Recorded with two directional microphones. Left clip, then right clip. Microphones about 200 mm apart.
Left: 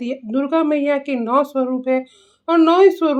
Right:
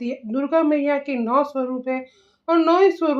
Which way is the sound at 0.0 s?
35° left (ahead or behind).